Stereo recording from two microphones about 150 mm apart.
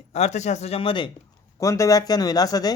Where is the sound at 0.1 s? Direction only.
50° left (ahead or behind).